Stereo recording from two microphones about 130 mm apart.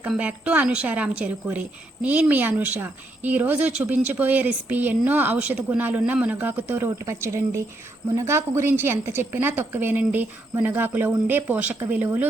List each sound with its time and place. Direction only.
0.1 s a woman's voice: 10° right (ahead or behind)